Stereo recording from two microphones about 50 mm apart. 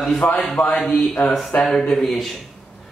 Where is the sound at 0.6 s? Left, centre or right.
Left.